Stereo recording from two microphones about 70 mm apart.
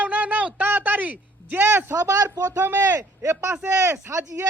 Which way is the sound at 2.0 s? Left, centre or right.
Right.